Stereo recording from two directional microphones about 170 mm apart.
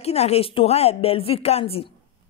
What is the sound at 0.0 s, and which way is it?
Speech, 40° left (ahead or behind).